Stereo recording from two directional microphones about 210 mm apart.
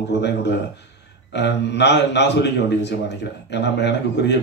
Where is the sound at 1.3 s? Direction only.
55° left (ahead or behind).